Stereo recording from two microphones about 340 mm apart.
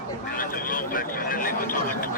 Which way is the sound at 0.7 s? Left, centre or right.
Left.